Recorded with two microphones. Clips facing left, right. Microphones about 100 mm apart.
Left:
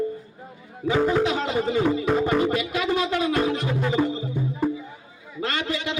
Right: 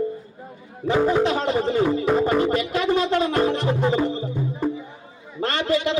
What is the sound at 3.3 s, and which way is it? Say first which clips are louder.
Music: right 3 dB; 30° right (ahead or behind).